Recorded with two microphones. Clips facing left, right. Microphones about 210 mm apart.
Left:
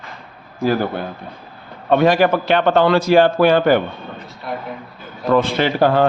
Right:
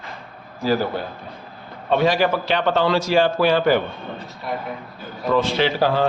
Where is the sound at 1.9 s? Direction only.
55° left (ahead or behind).